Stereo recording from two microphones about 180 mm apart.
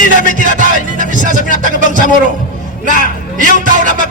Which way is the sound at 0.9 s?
45° right (ahead or behind).